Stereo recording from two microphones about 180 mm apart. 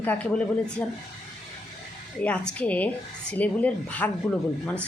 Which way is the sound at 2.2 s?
5° left (ahead or behind).